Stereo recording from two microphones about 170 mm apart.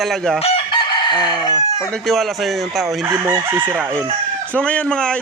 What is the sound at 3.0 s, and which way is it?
Chicken, 15° right (ahead or behind).